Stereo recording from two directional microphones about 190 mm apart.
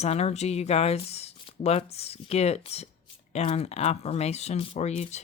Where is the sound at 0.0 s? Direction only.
35° left (ahead or behind).